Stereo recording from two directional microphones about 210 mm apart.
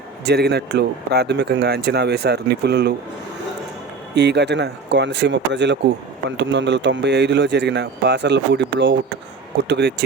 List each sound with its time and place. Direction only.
0.3 s speech: 50° right (ahead or behind)
4.1 s speech: 55° right (ahead or behind)